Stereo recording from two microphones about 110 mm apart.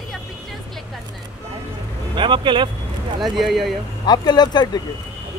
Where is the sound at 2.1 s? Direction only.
45° right (ahead or behind).